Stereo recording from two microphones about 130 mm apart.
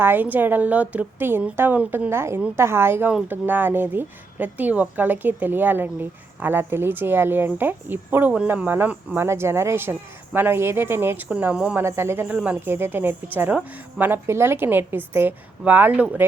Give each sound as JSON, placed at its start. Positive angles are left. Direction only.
{"t": 0.0, "sound": "a woman's voice", "side_deg": -15}
{"t": 11.9, "sound": "a woman's voice", "side_deg": -20}